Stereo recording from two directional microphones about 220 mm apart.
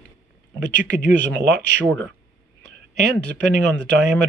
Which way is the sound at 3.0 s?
50° right (ahead or behind).